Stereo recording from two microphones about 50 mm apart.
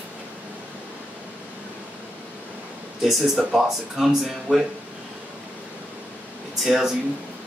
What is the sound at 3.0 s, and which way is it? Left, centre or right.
Speech, centre.